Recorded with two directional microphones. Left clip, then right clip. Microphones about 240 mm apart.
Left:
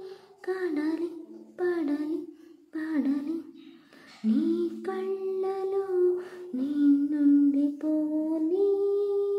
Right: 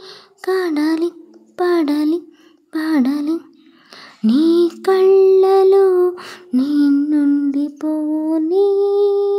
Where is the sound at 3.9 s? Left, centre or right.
Right.